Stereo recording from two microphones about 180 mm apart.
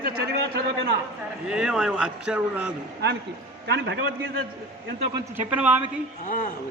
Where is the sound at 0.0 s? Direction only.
60° right (ahead or behind).